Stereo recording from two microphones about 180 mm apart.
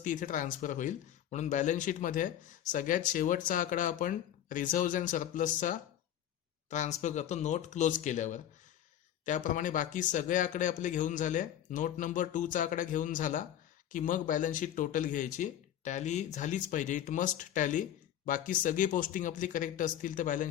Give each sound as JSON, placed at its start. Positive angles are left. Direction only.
{"t": 0.0, "sound": "speech", "side_deg": 45}